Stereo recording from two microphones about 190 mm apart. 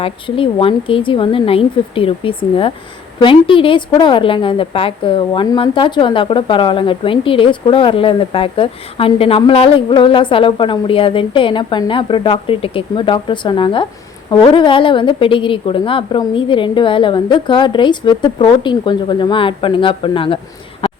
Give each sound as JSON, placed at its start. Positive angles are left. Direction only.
{"t": 0.0, "sound": "a woman's voice", "side_deg": 30}